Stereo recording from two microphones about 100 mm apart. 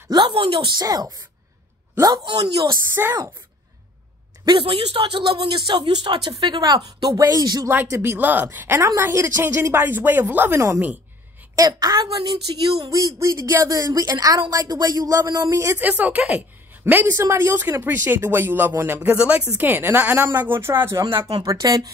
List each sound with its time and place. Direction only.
0.3 s speech: 65° right (ahead or behind)
0.7 s a man's voice: 40° right (ahead or behind)
2.9 s a woman's voice: 20° right (ahead or behind)
4.6 s speech: 65° right (ahead or behind); by 7.6 s 40° right (ahead or behind)
7.7 s a woman's voice: 25° right (ahead or behind)
15.8 s a woman's voice: 15° right (ahead or behind)
21.5 s speech: 35° right (ahead or behind)